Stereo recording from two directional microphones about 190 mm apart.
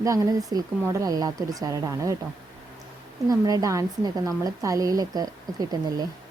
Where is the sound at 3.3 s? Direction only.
20° right (ahead or behind).